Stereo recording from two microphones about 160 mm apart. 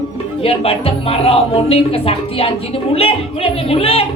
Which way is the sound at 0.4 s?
35° left (ahead or behind).